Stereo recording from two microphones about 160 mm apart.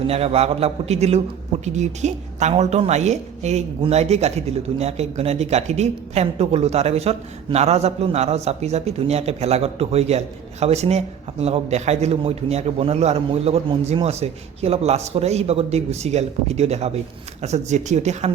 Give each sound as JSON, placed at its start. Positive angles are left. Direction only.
{"t": 0.1, "sound": "a woman's voice", "side_deg": -40}